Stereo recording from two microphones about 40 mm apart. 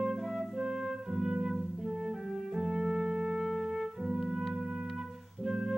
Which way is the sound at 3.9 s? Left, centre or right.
Right.